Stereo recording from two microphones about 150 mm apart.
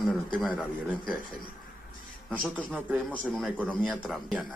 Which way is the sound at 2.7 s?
5° right (ahead or behind).